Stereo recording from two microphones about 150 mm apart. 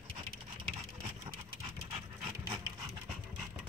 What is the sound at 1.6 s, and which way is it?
Dog, 40° right (ahead or behind).